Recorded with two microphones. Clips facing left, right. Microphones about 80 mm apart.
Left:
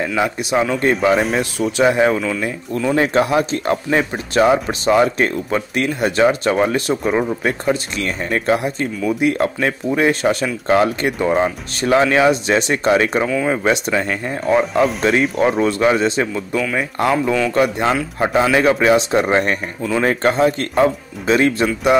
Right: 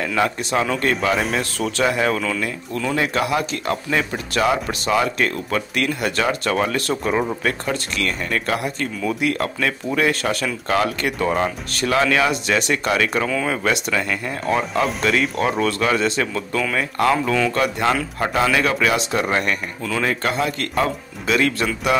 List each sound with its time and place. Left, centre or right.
0.1 s a man's voice: centre
1.8 s speech: left
2.1 s a man's voice: centre
3.0 s speech: left
13.3 s a man's voice: centre
13.7 s speech: left
14.4 s a man's voice: centre
15.6 s a man's voice: left
20.1 s speech: left